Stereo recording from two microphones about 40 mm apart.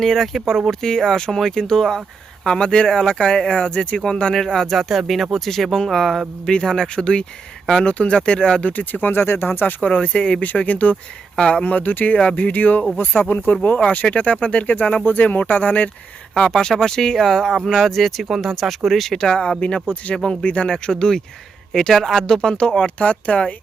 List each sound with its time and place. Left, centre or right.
0.0 s speech: centre
4.7 s speech: centre
6.5 s speech: centre
8.7 s speech: left
9.2 s speech: left
9.8 s speech: left
10.4 s speech: left
13.4 s speech: left
15.0 s speech: left
16.3 s speech: centre
19.1 s speech: left
21.7 s speech: centre
23.0 s speech: left